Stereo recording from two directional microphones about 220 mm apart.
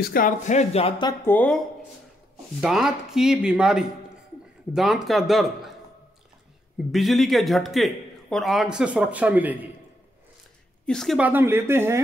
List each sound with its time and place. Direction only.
0.0 s speech: 40° left (ahead or behind); by 1.3 s 20° left (ahead or behind)
1.3 s a man's voice: 5° left (ahead or behind)
2.6 s a man's voice: centre (ahead or behind)
6.9 s a man's voice: centre (ahead or behind)
10.9 s speech: centre (ahead or behind)